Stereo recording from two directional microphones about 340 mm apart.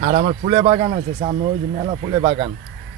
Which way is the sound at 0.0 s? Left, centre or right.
Centre.